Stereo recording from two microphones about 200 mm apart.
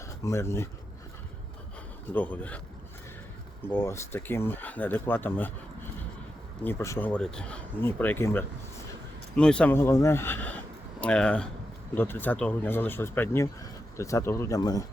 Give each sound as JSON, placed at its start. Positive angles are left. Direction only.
{"t": 0.2, "sound": "speech", "side_deg": 15}
{"t": 2.1, "sound": "speech", "side_deg": 10}
{"t": 3.6, "sound": "speech", "side_deg": 10}